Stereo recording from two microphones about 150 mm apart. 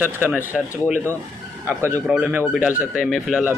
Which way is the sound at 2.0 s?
5° right (ahead or behind).